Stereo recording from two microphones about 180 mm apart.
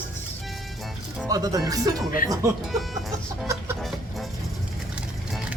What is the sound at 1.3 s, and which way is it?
Speech, 20° right (ahead or behind).